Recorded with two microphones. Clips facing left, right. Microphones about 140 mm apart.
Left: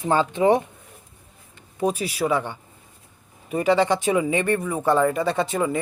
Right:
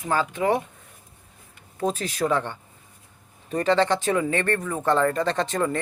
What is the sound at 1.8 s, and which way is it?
Speech, 10° left (ahead or behind).